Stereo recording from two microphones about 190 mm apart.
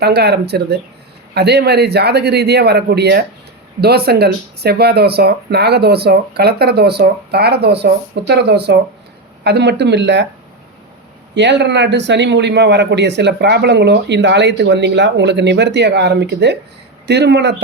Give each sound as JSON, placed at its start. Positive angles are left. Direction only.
{"t": 0.0, "sound": "speech", "side_deg": -60}
{"t": 11.3, "sound": "speech", "side_deg": -65}